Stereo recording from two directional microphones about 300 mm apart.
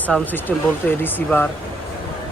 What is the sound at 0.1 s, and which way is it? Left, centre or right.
Speech, centre.